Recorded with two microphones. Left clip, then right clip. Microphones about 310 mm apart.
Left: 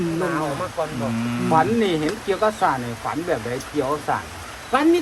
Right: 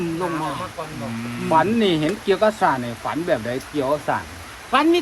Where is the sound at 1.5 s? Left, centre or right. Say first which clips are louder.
Right 1 dB; right.